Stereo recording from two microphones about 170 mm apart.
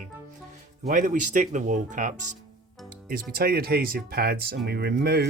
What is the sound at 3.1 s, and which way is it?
Speech, 60° right (ahead or behind).